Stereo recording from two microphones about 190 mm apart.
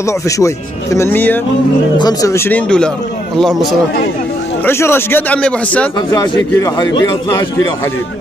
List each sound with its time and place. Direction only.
0.0 s a man's voice: 15° left (ahead or behind)
4.6 s a man's voice: 10° left (ahead or behind)
5.9 s a man's voice: 20° left (ahead or behind)